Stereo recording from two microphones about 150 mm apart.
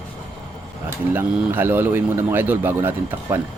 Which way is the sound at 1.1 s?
15° right (ahead or behind).